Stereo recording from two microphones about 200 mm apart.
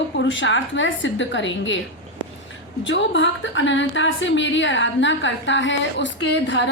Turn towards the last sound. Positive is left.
turn(degrees=60)  # may be behind; listen again after turning